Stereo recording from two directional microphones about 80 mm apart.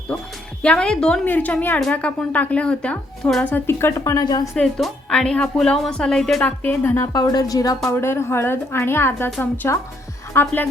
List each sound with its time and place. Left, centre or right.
0.6 s speech: centre
3.4 s a woman's voice: left
4.5 s speech: centre
6.4 s speech: left
7.1 s a woman's voice: left
7.9 s a woman's voice: left
10.4 s speech: left